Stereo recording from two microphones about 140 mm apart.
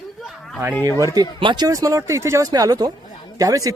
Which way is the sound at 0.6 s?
15° right (ahead or behind).